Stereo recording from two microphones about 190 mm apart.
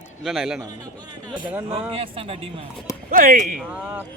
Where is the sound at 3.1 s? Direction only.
45° right (ahead or behind).